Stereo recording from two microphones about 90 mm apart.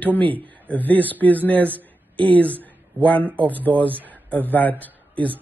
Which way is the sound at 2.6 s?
15° left (ahead or behind).